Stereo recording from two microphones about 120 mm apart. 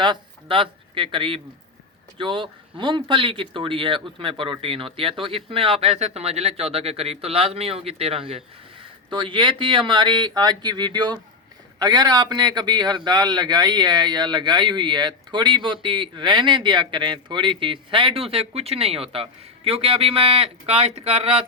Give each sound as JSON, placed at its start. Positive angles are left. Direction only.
{"t": 0.0, "sound": "speech", "side_deg": -45}
{"t": 9.0, "sound": "a man's voice", "side_deg": -45}